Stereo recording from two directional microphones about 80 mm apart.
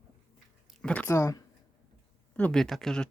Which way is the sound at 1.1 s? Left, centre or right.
Left.